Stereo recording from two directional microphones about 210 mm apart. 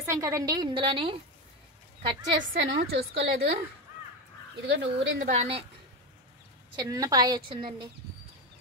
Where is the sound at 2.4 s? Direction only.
55° right (ahead or behind).